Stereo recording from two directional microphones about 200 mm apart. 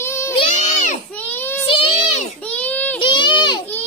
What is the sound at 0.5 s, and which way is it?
Baby cry, 35° left (ahead or behind).